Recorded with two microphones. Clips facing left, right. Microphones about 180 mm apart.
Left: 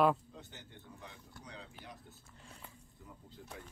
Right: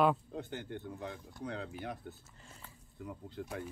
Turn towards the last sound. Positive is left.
turn(degrees=-70)  # may be behind; listen again after turning